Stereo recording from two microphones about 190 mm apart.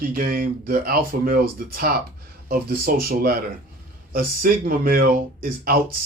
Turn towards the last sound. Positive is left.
turn(degrees=-50)  # may be behind; listen again after turning